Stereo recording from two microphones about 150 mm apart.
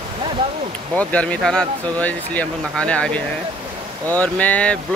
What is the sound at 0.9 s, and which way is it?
Speech, 10° left (ahead or behind).